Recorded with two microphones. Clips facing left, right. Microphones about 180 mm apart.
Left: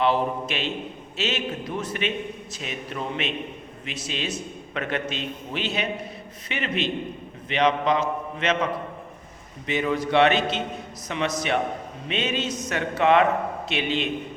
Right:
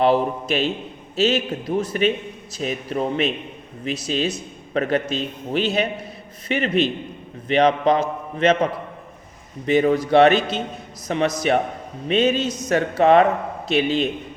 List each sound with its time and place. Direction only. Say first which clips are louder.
0.0 s a man's voice: right 4 dB; 40° right (ahead or behind)
9.6 s a man's voice: right 7 dB; 40° right (ahead or behind)